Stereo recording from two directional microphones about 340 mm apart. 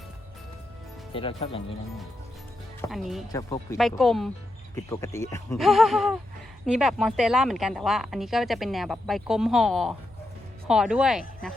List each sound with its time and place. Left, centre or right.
1.1 s speech: centre
2.9 s speech: centre